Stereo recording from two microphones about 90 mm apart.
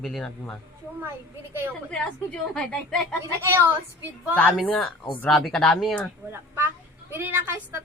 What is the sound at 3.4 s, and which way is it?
Speech, 25° right (ahead or behind).